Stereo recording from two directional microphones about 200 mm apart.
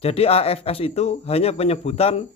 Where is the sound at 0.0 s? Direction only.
30° left (ahead or behind).